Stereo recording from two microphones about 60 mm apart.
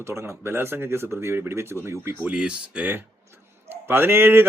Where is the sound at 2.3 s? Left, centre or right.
Centre.